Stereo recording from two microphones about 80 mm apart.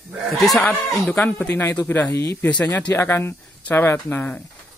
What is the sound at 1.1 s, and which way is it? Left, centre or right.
Speech, centre.